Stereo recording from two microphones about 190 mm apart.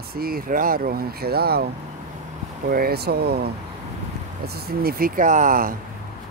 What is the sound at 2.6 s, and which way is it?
Speech, 50° right (ahead or behind).